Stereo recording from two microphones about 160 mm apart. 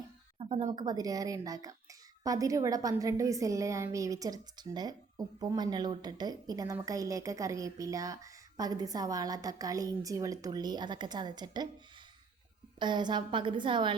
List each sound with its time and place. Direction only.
0.3 s a woman's voice: 35° right (ahead or behind)
12.8 s a woman's voice: 30° right (ahead or behind)